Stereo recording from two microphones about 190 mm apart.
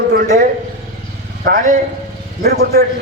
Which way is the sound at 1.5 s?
50° right (ahead or behind).